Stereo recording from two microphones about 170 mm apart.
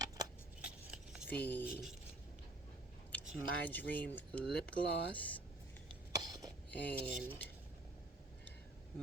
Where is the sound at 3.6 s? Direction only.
10° left (ahead or behind).